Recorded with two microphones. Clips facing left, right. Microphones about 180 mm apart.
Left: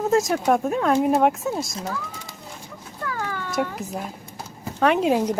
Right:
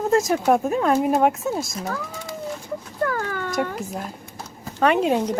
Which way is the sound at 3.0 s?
50° right (ahead or behind).